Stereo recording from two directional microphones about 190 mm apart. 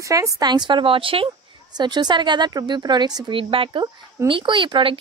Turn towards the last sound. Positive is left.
turn(degrees=-25)  # may be behind; listen again after turning